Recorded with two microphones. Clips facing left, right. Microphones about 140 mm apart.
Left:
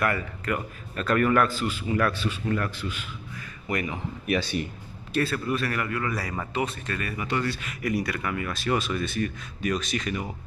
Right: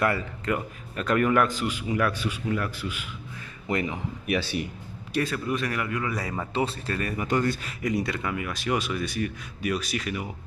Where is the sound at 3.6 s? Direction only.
25° right (ahead or behind).